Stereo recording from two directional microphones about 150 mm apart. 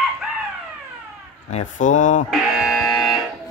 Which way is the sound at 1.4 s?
50° left (ahead or behind).